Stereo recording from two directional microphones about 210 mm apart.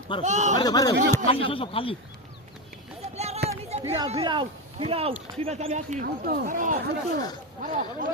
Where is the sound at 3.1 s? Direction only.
30° right (ahead or behind).